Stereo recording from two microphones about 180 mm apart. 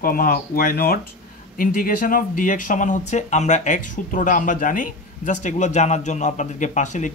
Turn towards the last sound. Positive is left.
turn(degrees=45)  # may be behind; listen again after turning